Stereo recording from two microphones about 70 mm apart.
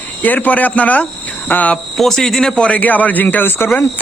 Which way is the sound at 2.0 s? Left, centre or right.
Centre.